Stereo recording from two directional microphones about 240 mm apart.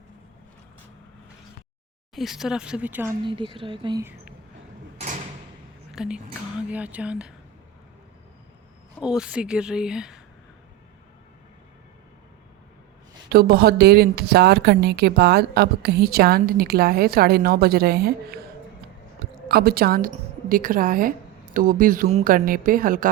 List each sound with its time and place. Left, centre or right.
2.1 s speech: centre
4.9 s mechanisms: right
5.9 s a woman's voice: centre
9.0 s a woman's voice: centre
13.3 s a woman's voice: right
19.5 s a woman's voice: right